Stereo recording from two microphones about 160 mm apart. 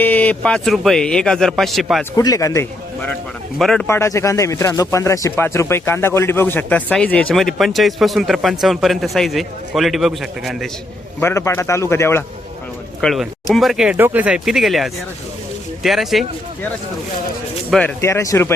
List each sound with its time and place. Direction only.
0.0 s a man's voice: 10° left (ahead or behind)
2.1 s speech: 20° left (ahead or behind)
3.6 s a man's voice: 5° left (ahead or behind)
3.8 s a man's voice: 15° left (ahead or behind); by 10.7 s centre (ahead or behind)
11.2 s speech: 15° left (ahead or behind)
13.0 s a man's voice: centre (ahead or behind)
17.7 s speech: 5° left (ahead or behind)
18.0 s speech: 20° left (ahead or behind)